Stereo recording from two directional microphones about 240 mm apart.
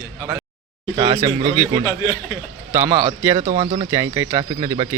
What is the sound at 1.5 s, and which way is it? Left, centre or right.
Speech, centre.